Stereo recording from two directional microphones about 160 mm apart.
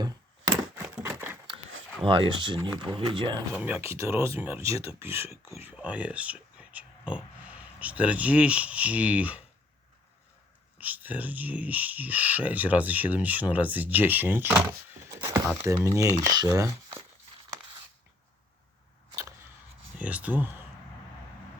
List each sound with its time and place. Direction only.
1.0 s a sound: 15° right (ahead or behind)
2.0 s speech: 30° right (ahead or behind)
3.5 s speech: 10° right (ahead or behind)
10.8 s speech: 10° right (ahead or behind)
20.0 s speech: 10° right (ahead or behind)